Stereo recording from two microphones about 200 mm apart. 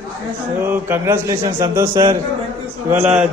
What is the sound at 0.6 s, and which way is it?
A man's voice, 10° right (ahead or behind).